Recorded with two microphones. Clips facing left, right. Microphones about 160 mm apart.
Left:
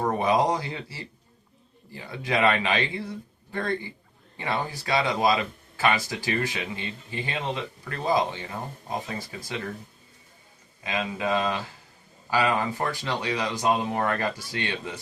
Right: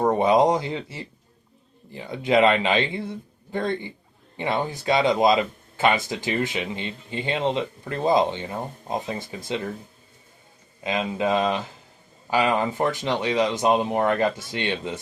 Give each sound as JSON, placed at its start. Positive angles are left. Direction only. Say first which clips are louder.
{"t": 0.0, "sound": "speech", "louder": "right 5 dB", "side_deg": -25}
{"t": 10.8, "sound": "speech", "louder": "right 4 dB", "side_deg": -20}